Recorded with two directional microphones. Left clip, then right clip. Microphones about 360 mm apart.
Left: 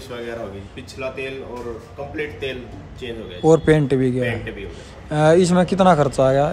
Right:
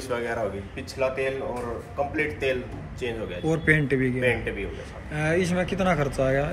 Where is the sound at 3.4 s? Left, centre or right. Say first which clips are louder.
Left 9 dB; centre.